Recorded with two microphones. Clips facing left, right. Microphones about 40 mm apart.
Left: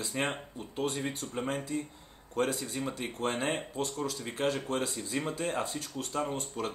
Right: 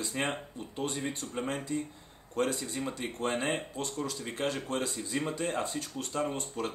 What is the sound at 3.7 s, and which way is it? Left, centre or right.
Speech, left.